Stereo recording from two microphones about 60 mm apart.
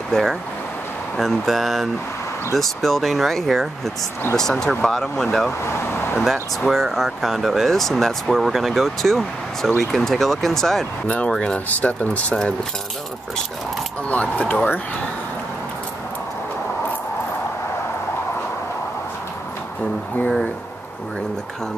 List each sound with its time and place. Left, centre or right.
0.1 s speech: centre
5.7 s speech: left
6.6 s speech: centre
11.1 s speech: left
14.0 s speech: left